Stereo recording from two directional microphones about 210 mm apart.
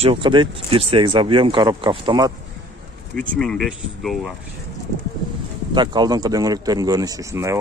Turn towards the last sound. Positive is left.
turn(degrees=-15)  # may be behind; listen again after turning